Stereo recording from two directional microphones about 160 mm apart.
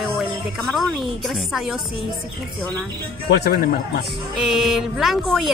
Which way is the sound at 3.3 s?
75° left (ahead or behind).